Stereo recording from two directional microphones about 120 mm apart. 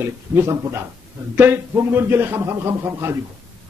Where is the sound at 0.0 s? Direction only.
20° right (ahead or behind).